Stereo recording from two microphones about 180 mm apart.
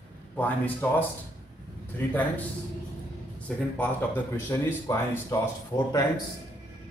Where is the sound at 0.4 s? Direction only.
10° left (ahead or behind).